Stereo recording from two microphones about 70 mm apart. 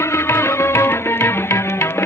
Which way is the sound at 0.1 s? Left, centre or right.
Left.